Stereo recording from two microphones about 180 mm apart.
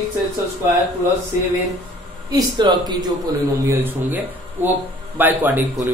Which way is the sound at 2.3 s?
25° right (ahead or behind).